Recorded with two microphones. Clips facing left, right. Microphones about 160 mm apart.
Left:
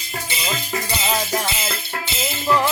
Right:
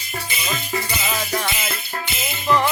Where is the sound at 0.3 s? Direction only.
30° left (ahead or behind).